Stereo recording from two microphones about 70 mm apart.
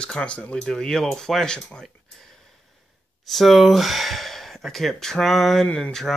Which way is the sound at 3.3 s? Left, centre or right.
Centre.